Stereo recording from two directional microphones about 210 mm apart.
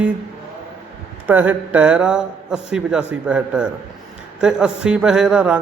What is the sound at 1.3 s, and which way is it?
A man's voice, 5° right (ahead or behind).